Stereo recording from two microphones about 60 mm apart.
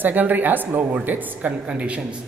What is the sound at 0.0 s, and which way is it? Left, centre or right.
A woman's voice, right.